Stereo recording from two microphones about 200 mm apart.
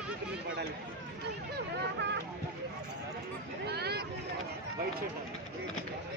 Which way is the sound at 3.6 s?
55° right (ahead or behind).